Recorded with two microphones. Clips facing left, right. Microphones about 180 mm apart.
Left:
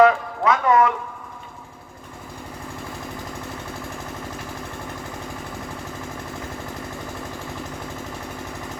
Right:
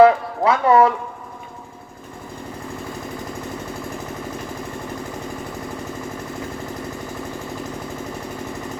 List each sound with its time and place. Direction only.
0.0 s speech: 30° right (ahead or behind)